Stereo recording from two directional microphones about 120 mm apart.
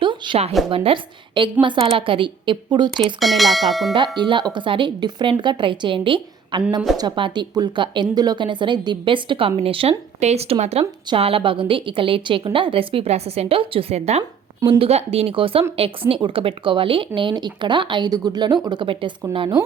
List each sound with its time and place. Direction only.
0.0 s a sound: 40° right (ahead or behind)
0.6 s speech: centre (ahead or behind)
1.6 s speech: 45° right (ahead or behind)
2.9 s speech: centre (ahead or behind)
3.9 s speech: 40° right (ahead or behind)
10.2 s a woman's voice: 65° right (ahead or behind)
11.1 s a woman's voice: 50° right (ahead or behind)
14.6 s a woman's voice: 45° right (ahead or behind)
14.8 s speech: 60° right (ahead or behind)